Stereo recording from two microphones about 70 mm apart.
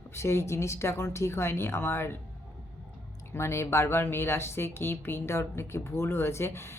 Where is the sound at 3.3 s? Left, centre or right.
Left.